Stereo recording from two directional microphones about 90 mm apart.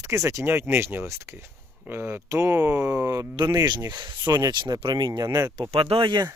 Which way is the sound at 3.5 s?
50° right (ahead or behind).